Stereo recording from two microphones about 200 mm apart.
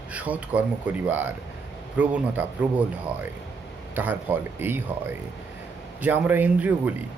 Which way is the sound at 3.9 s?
10° right (ahead or behind).